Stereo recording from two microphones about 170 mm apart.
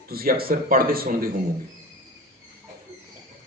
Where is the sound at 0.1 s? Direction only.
60° right (ahead or behind).